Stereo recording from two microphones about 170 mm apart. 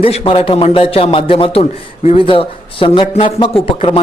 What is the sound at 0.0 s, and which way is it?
Speech, 35° left (ahead or behind).